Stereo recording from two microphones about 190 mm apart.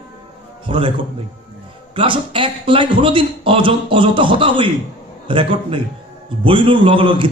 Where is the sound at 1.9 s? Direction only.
25° right (ahead or behind).